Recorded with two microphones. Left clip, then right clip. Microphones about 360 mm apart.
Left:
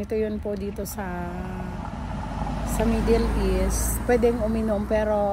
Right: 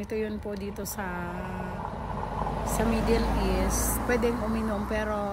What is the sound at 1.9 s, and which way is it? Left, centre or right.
Vehicle, centre.